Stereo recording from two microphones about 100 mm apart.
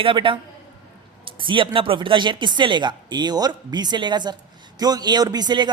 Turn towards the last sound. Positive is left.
turn(degrees=-45)  # may be behind; listen again after turning